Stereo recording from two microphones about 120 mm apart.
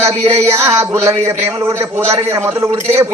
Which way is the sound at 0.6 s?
25° right (ahead or behind).